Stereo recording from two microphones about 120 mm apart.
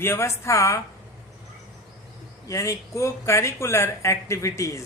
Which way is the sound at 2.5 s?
25° left (ahead or behind).